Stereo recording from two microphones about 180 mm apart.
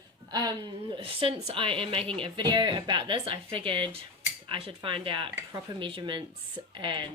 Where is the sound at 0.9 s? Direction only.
30° right (ahead or behind).